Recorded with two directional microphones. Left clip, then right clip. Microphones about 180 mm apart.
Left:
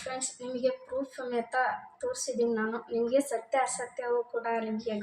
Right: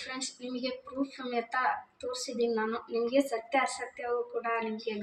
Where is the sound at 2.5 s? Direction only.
10° right (ahead or behind).